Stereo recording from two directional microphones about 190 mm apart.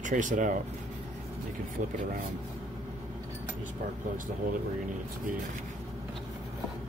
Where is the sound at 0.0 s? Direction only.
40° right (ahead or behind).